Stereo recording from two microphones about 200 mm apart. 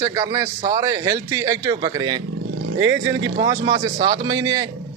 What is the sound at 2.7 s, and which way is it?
Speech, 75° right (ahead or behind).